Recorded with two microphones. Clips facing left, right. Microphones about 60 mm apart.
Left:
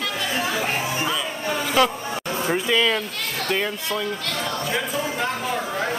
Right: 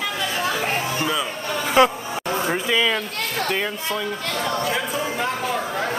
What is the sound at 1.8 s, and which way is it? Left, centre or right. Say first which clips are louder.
Speech: right 4 dB; right.